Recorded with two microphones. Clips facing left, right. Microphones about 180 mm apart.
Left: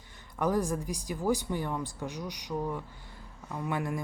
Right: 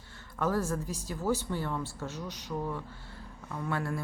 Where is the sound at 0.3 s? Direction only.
15° left (ahead or behind).